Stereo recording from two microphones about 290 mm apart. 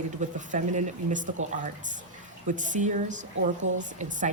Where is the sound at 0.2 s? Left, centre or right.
Right.